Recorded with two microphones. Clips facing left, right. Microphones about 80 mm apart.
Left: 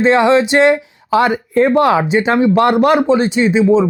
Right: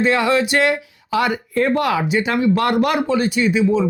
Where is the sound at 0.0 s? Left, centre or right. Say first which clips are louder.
Left 6 dB; left.